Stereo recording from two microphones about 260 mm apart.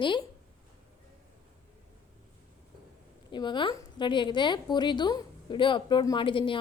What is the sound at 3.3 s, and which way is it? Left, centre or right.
A woman's voice, centre.